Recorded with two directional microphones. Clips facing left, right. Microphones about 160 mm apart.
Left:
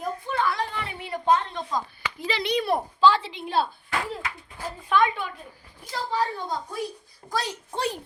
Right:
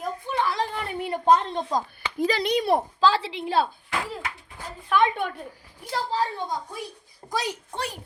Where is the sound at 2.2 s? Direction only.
45° right (ahead or behind).